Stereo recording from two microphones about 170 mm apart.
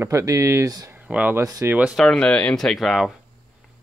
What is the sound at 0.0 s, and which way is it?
Speech, 20° right (ahead or behind).